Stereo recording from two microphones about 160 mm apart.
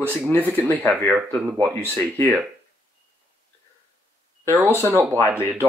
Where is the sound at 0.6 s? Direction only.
10° left (ahead or behind).